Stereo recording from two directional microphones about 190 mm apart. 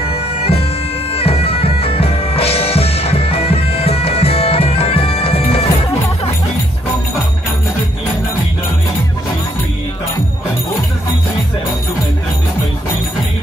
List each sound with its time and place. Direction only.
0.1 s bagpipes: 30° left (ahead or behind)